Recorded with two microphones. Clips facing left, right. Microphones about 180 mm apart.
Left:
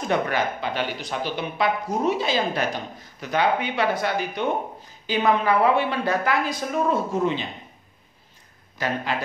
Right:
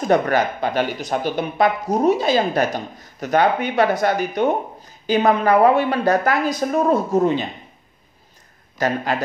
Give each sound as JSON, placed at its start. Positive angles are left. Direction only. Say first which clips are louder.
{"t": 0.1, "sound": "speech", "louder": "right 6 dB", "side_deg": -45}
{"t": 8.7, "sound": "speech", "louder": "right 5 dB", "side_deg": -40}